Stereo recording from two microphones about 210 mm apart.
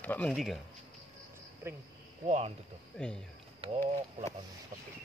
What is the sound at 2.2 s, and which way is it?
Speech, 35° right (ahead or behind).